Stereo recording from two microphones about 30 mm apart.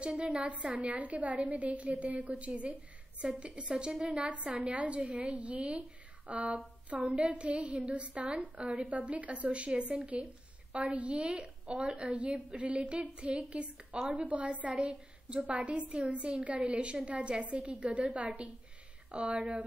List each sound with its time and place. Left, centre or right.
0.0 s a woman's voice: right
7.3 s a woman's voice: right
8.8 s a woman's voice: right
9.5 s a woman's voice: right
14.1 s a woman's voice: right
14.8 s a woman's voice: right